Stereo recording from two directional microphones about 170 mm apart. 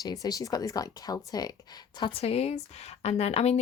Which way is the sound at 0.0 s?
20° left (ahead or behind).